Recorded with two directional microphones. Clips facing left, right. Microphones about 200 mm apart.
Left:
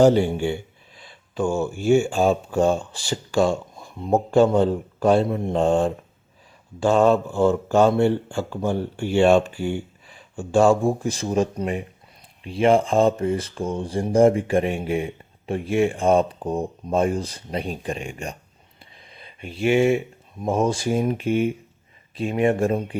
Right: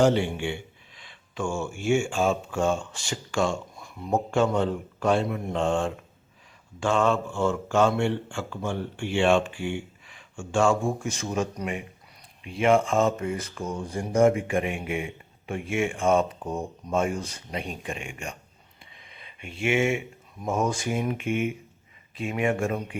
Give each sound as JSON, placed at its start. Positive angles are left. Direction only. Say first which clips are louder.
{"t": 0.0, "sound": "speech", "louder": "left 6 dB", "side_deg": 40}